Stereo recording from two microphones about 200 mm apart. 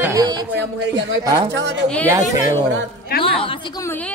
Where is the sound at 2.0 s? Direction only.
15° right (ahead or behind).